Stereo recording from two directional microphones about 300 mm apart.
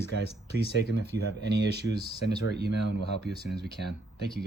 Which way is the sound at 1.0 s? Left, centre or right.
Right.